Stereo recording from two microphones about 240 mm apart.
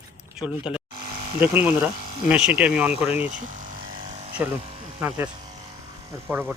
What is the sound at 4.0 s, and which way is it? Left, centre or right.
Electric shaver, right.